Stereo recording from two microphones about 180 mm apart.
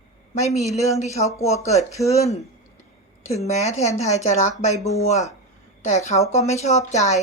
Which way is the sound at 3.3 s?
40° left (ahead or behind).